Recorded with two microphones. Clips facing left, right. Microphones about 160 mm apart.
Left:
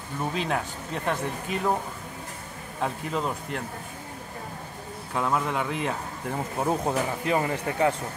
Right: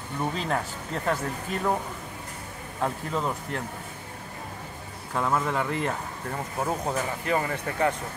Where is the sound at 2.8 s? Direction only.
10° left (ahead or behind).